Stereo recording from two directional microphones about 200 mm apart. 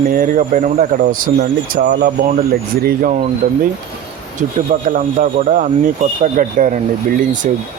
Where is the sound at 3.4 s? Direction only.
40° right (ahead or behind).